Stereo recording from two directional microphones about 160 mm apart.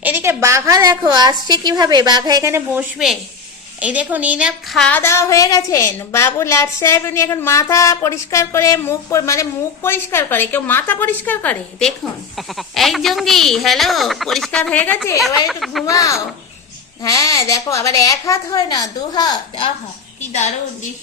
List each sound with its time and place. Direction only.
0.0 s a woman's voice: 15° right (ahead or behind)
4.8 s a woman's voice: 10° left (ahead or behind)
15.4 s speech: centre (ahead or behind)
15.9 s a woman's voice: 20° left (ahead or behind)